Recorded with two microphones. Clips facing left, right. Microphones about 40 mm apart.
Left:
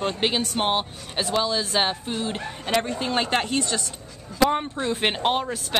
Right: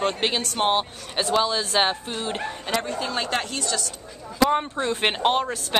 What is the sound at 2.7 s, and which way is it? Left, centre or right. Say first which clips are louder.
Speech: left 3 dB; centre.